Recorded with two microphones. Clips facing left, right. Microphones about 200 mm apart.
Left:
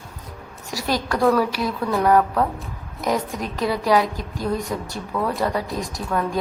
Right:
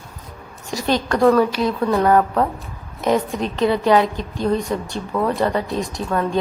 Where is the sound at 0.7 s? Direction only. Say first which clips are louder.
Right 4 dB; 20° right (ahead or behind).